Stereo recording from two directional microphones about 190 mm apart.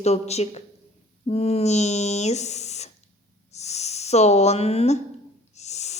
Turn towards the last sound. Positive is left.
turn(degrees=35)  # may be behind; listen again after turning